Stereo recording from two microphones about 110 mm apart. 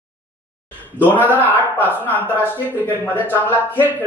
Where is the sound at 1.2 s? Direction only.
15° left (ahead or behind).